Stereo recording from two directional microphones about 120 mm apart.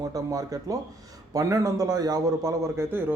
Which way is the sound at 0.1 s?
30° right (ahead or behind).